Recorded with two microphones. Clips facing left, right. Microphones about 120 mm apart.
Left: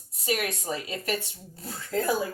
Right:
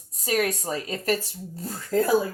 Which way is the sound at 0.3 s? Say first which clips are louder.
Right 4 dB; 40° right (ahead or behind).